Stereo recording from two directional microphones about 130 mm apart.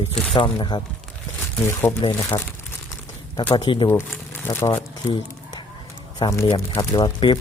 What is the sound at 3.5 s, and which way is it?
Speech, 40° left (ahead or behind).